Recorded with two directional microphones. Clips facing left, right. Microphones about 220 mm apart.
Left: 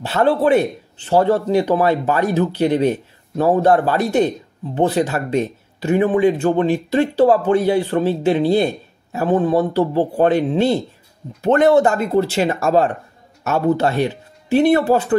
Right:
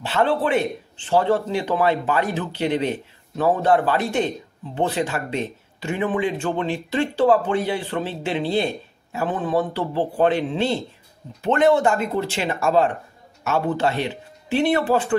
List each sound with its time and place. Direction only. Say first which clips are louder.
0.0 s speech: left 5 dB; 40° left (ahead or behind)